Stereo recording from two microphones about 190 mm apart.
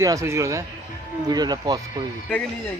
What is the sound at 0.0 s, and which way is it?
Speech, 15° right (ahead or behind).